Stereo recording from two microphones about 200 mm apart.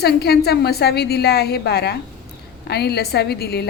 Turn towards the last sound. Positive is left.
turn(degrees=55)  # may be behind; listen again after turning